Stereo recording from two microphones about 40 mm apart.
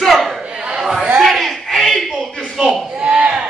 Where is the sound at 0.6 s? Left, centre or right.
Centre.